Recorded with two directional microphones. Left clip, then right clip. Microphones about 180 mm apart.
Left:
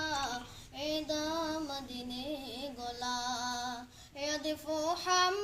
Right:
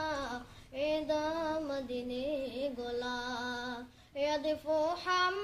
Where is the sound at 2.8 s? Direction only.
30° right (ahead or behind).